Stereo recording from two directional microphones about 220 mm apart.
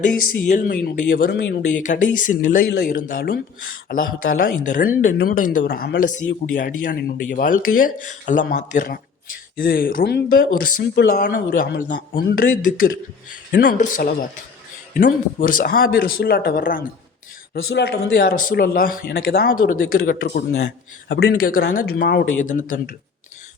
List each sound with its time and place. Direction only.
0.4 s speech: 35° left (ahead or behind)
1.7 s speech: 35° left (ahead or behind); by 11.2 s 50° left (ahead or behind)
11.2 s speech: 40° left (ahead or behind)